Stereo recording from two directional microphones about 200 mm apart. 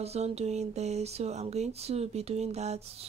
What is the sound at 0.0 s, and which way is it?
Speech, 30° right (ahead or behind).